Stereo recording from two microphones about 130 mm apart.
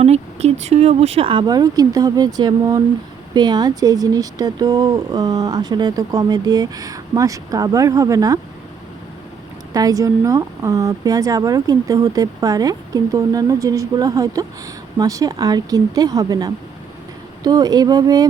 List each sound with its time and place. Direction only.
0.0 s speech: 55° right (ahead or behind); by 8.4 s 25° right (ahead or behind)
9.7 s speech: 25° right (ahead or behind)